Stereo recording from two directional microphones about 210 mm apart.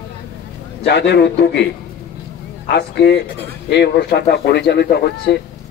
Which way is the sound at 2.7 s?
55° left (ahead or behind).